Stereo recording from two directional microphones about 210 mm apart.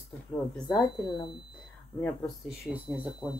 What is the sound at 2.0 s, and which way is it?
Speech, centre (ahead or behind).